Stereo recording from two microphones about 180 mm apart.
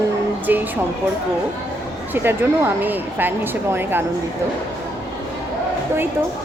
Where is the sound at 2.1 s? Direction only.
10° right (ahead or behind).